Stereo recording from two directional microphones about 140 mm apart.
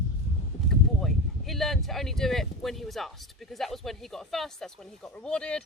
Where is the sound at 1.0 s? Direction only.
Centre (ahead or behind).